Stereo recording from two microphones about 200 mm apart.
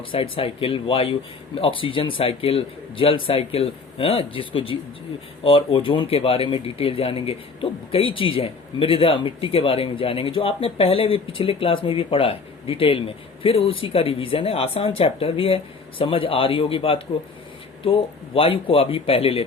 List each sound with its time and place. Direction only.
0.1 s speech: 25° left (ahead or behind)